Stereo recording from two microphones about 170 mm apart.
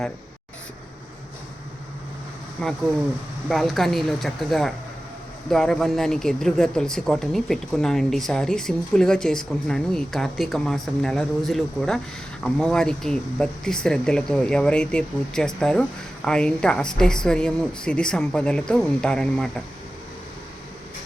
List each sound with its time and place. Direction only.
2.6 s speech: 5° left (ahead or behind)